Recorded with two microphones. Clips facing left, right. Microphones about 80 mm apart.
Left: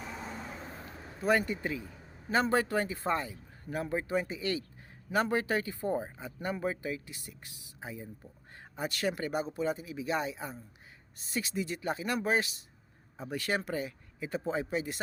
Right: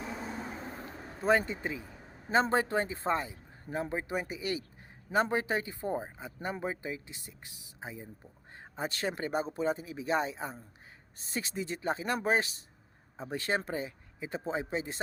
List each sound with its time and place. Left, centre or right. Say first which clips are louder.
1.2 s speech: right 1 dB; right